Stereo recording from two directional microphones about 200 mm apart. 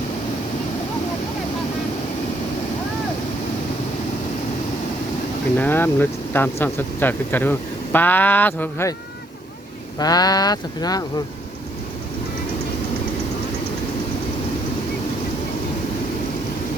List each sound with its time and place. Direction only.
5.5 s speech: 10° left (ahead or behind)
10.0 s speech: 20° left (ahead or behind)